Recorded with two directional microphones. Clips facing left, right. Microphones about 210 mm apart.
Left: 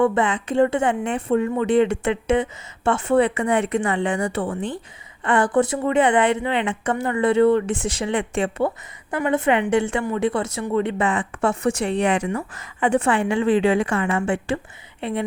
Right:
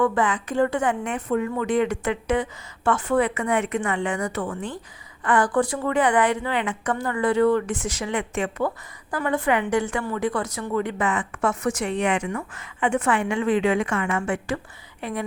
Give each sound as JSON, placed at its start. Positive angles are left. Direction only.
{"t": 0.0, "sound": "a woman's voice", "side_deg": 25}